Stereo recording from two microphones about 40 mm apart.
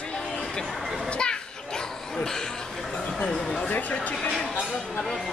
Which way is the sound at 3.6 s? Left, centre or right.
Left.